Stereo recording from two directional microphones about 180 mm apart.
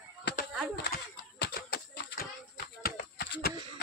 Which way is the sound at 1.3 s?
65° left (ahead or behind).